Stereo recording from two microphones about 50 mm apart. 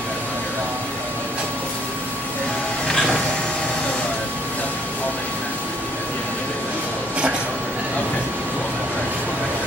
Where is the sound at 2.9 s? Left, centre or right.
Centre.